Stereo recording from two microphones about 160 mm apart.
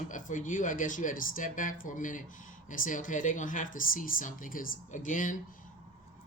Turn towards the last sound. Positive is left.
turn(degrees=55)  # may be behind; listen again after turning